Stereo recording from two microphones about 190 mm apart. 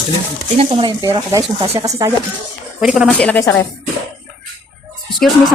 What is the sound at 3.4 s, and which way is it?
Speech, 20° left (ahead or behind).